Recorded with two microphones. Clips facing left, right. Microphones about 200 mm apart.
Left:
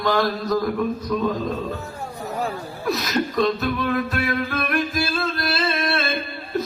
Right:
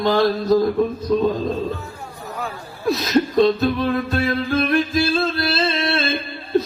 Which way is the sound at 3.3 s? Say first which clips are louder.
Right 4 dB; 25° right (ahead or behind).